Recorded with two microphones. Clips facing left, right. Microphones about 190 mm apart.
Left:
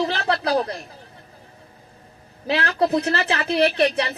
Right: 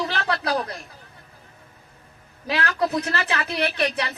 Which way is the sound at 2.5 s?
30° left (ahead or behind).